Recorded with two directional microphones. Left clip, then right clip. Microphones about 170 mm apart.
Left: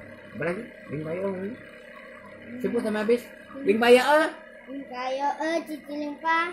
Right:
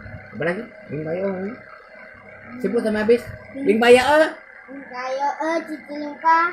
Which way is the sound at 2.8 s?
5° right (ahead or behind).